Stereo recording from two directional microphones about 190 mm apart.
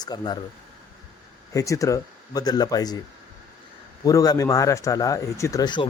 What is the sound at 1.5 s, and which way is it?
A man's voice, 15° left (ahead or behind).